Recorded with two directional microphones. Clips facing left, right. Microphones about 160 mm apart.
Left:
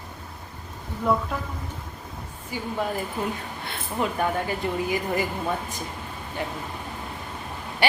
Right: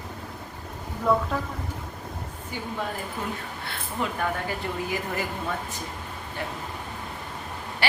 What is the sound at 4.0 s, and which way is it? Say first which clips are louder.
Speech: left 3 dB; 15° left (ahead or behind).